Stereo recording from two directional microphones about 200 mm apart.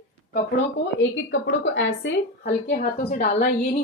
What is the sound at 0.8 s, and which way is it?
A woman's voice, 75° left (ahead or behind).